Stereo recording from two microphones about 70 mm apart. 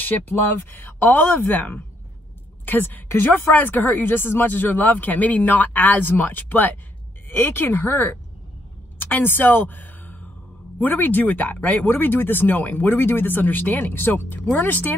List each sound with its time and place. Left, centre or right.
0.0 s speech: left
8.9 s a sound: left
10.8 s speech: left